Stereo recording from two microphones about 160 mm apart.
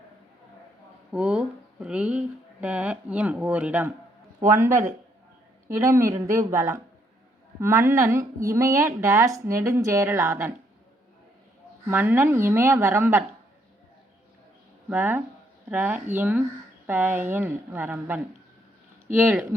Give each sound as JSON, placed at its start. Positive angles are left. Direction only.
{"t": 1.1, "sound": "a woman's voice", "side_deg": -5}
{"t": 11.9, "sound": "a woman's voice", "side_deg": -15}
{"t": 14.8, "sound": "a woman's voice", "side_deg": -10}